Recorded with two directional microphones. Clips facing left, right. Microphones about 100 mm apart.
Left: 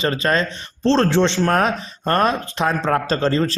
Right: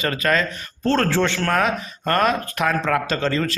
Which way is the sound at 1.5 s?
35° left (ahead or behind).